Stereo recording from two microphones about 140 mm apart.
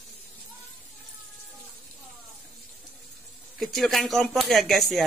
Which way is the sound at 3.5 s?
Centre (ahead or behind).